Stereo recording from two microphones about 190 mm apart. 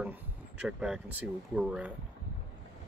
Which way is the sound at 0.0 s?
5° right (ahead or behind).